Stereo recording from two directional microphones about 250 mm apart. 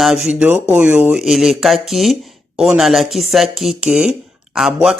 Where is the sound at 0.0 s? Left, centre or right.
Centre.